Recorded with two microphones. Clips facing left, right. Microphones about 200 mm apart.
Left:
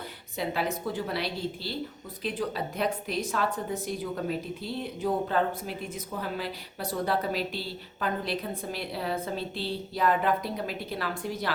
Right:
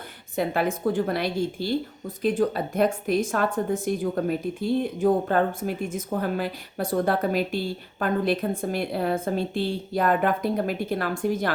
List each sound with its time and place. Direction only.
0.3 s a woman's voice: 50° right (ahead or behind)